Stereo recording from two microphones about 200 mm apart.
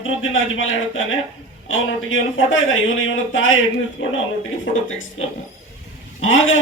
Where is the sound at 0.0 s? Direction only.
75° left (ahead or behind).